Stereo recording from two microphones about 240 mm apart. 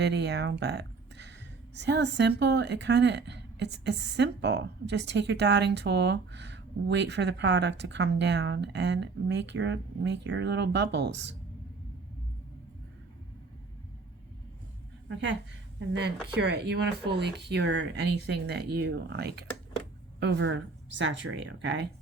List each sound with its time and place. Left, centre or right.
0.0 s speech: right
15.1 s speech: right